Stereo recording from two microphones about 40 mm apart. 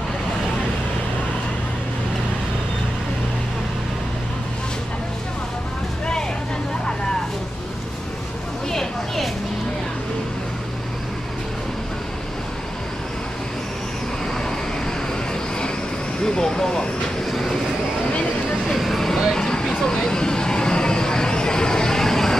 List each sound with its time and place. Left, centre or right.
8.6 s a sound: centre
16.2 s vehicle: centre
17.3 s train: centre
18.7 s vehicle: centre